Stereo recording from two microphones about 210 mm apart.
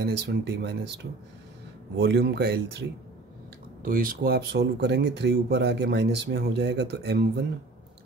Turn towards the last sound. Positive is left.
turn(degrees=-50)  # may be behind; listen again after turning